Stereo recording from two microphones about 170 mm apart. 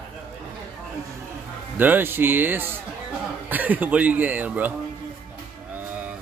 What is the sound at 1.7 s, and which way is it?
Speech, 10° right (ahead or behind).